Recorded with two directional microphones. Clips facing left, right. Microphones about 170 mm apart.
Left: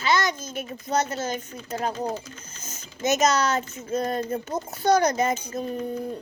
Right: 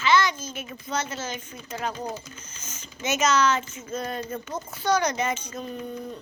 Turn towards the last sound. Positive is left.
turn(degrees=45)  # may be behind; listen again after turning